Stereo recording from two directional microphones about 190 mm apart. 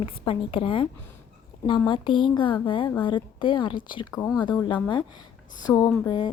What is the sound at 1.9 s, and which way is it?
Speech, 25° left (ahead or behind).